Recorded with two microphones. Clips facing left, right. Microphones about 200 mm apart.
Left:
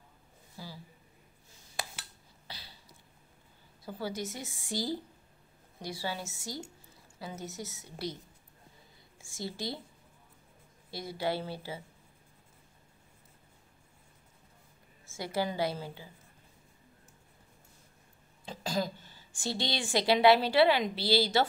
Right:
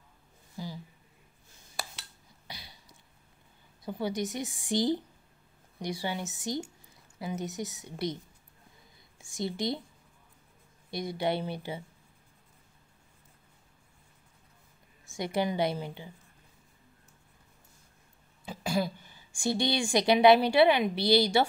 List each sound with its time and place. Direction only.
0.6 s a sound: 15° right (ahead or behind)
2.4 s a sound: 15° right (ahead or behind)
3.8 s a woman's voice: 20° right (ahead or behind)
9.2 s a woman's voice: 20° right (ahead or behind)
10.9 s a woman's voice: 20° right (ahead or behind)
15.0 s a woman's voice: 20° right (ahead or behind)
18.4 s a woman's voice: 10° right (ahead or behind)